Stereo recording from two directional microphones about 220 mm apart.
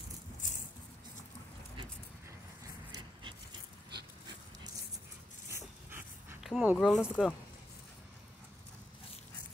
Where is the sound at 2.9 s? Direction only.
20° right (ahead or behind).